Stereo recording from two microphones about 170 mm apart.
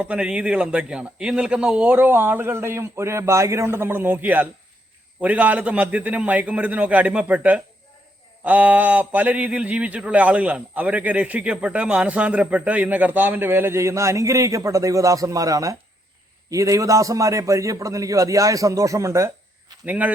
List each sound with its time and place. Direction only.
0.0 s a man's voice: 5° right (ahead or behind)